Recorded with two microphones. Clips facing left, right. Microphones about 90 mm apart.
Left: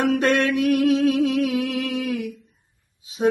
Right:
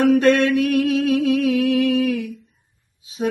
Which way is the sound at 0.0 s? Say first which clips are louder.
Right 5 dB; 30° left (ahead or behind).